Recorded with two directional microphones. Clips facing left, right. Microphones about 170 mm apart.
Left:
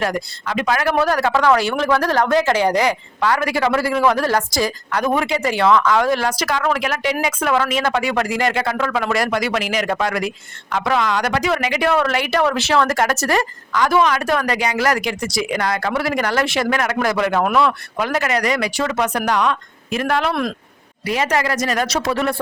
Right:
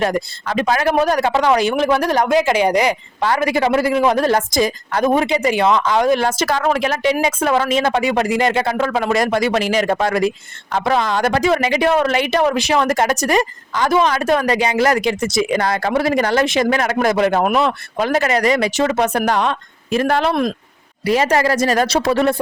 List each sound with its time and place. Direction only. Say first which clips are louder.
0.4 s a woman's voice: right 2 dB; 30° right (ahead or behind)